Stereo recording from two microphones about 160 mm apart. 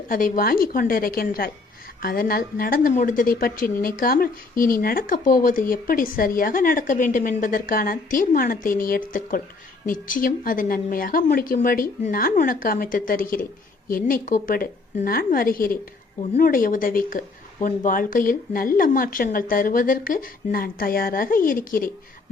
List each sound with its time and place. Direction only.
0.1 s a woman's voice: 60° left (ahead or behind)